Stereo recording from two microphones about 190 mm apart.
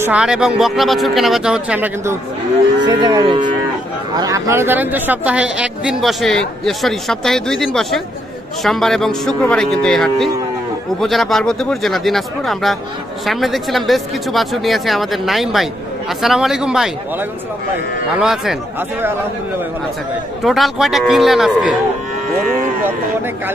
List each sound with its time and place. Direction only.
0.0 s speech: 5° right (ahead or behind)
2.8 s moo: 20° right (ahead or behind)
4.2 s speech: 15° right (ahead or behind)
20.4 s speech: centre (ahead or behind)